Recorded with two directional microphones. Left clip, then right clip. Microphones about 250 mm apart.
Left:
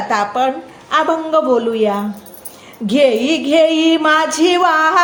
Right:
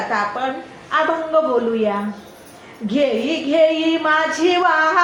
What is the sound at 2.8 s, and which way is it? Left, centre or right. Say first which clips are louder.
Speech: left 6 dB; left.